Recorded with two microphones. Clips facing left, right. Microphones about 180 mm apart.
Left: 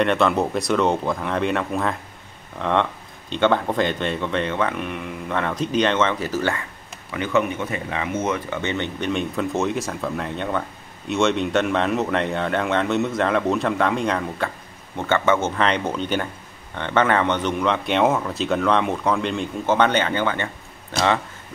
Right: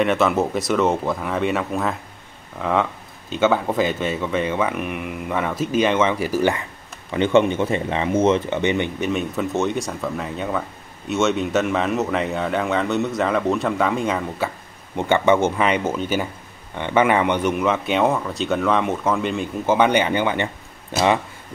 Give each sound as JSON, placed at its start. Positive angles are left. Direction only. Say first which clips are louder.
{"t": 0.0, "sound": "speech", "louder": "right 1 dB", "side_deg": -5}
{"t": 7.1, "sound": "speech", "louder": "right 5 dB", "side_deg": -25}
{"t": 9.1, "sound": "speech", "louder": "left 2 dB", "side_deg": 0}
{"t": 15.0, "sound": "speech", "louder": "right 3 dB", "side_deg": -15}